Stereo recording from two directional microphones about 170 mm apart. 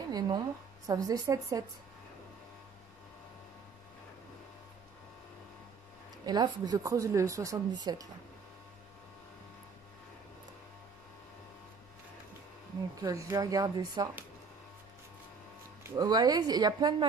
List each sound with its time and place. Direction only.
0.1 s speech: 25° right (ahead or behind)
6.2 s speech: 25° right (ahead or behind)
12.9 s speech: 20° right (ahead or behind)
15.8 s speech: 25° right (ahead or behind)